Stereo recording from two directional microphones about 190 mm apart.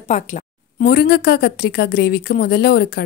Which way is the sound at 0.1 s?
40° left (ahead or behind).